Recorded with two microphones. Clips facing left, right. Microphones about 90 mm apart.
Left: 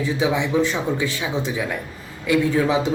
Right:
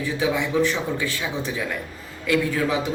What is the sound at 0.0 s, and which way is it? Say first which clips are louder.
A man's voice: left 2 dB; 20° left (ahead or behind).